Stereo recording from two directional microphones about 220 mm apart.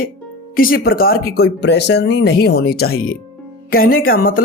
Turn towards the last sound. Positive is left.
turn(degrees=40)  # may be behind; listen again after turning